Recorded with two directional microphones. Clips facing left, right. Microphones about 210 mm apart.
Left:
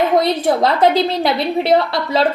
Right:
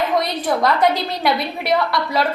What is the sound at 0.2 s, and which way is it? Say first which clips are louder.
A woman's voice: left 5 dB; 30° left (ahead or behind).